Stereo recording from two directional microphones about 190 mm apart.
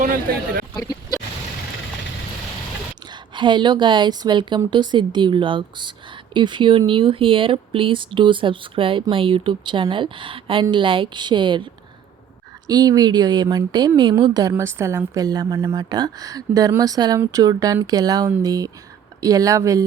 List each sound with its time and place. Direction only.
0.0 s a man's voice: 50° right (ahead or behind)
3.1 s speech: 25° right (ahead or behind)